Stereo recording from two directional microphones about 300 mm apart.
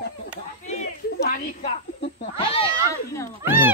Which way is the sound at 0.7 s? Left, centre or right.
Left.